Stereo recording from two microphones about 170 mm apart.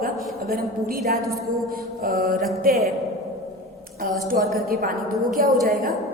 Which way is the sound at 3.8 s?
60° right (ahead or behind).